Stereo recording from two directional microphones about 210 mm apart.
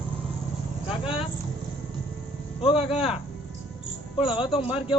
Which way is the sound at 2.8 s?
30° left (ahead or behind).